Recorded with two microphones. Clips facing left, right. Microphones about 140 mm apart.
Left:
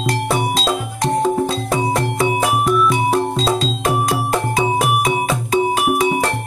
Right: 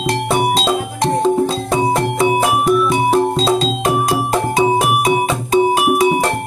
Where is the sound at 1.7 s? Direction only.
20° right (ahead or behind).